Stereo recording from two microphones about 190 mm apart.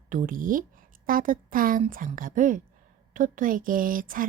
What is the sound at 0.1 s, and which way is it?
A woman's voice, 45° right (ahead or behind).